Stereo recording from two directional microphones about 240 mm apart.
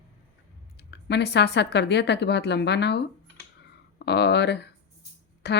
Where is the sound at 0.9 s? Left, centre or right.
Left.